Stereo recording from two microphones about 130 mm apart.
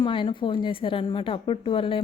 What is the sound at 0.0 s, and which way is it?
Speech, 40° left (ahead or behind).